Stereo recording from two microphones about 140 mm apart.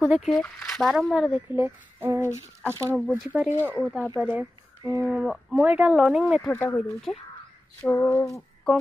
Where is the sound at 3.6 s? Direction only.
15° right (ahead or behind).